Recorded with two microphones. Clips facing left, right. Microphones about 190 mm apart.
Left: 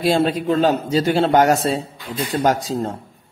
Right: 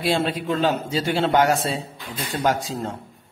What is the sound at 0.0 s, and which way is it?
A man's voice, 40° left (ahead or behind).